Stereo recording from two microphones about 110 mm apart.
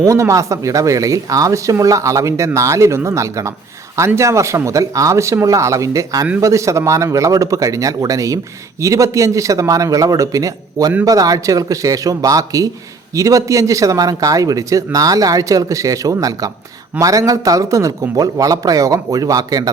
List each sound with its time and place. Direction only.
0.0 s a man's voice: 30° right (ahead or behind)